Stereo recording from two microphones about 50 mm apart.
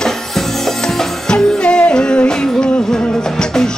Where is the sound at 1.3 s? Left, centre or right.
Centre.